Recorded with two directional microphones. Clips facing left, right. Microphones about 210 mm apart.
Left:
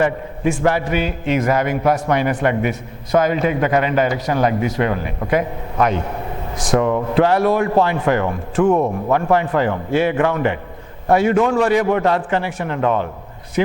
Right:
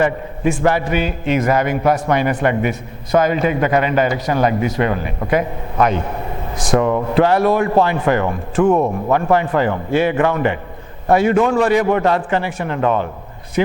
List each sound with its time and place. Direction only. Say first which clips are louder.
0.0 s a man's voice: right 1 dB; 15° right (ahead or behind)